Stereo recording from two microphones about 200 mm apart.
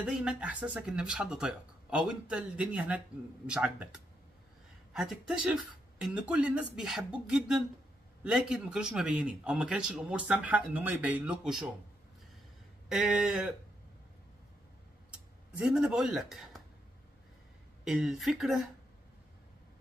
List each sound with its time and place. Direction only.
0.0 s a man's voice: 5° right (ahead or behind)
12.8 s a man's voice: 5° right (ahead or behind)
15.5 s a man's voice: 5° right (ahead or behind)
17.8 s a man's voice: centre (ahead or behind)